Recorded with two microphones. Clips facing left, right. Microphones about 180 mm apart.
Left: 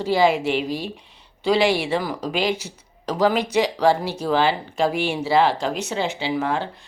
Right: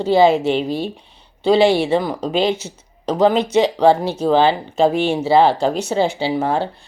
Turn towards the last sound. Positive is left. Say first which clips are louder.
# right 4 dB
turn(degrees=-30)  # may be behind; listen again after turning